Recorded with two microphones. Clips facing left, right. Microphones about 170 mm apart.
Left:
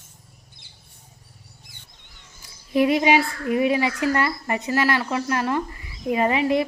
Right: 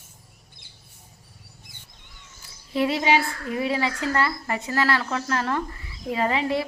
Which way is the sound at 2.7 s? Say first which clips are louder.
Left 4 dB; 15° left (ahead or behind).